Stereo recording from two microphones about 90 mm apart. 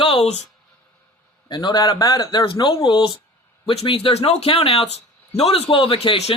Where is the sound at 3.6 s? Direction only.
80° left.